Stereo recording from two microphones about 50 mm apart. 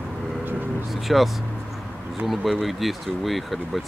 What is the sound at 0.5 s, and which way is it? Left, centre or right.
Vehicle, right.